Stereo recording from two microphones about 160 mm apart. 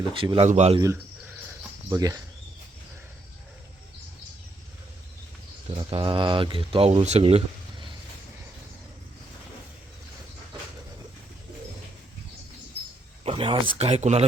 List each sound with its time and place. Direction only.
0.1 s speech: 35° right (ahead or behind)
0.4 s speech: 45° right (ahead or behind)
1.9 s speech: 20° right (ahead or behind)
5.7 s speech: 30° right (ahead or behind)
13.2 s speech: 30° right (ahead or behind)